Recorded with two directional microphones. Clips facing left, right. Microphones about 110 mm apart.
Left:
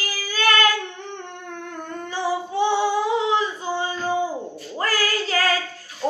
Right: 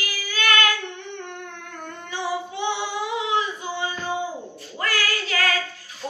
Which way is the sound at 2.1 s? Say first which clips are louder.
Left 4 dB; 35° left (ahead or behind).